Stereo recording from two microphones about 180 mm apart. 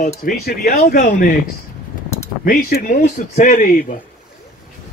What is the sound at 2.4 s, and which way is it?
A man's voice, 50° left (ahead or behind).